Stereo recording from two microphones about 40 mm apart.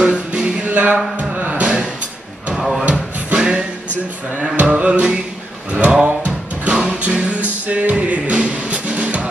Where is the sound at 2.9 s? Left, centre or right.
Right.